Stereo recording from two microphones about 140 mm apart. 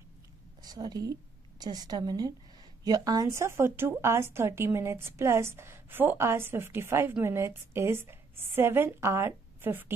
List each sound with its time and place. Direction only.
0.6 s a woman's voice: 30° right (ahead or behind)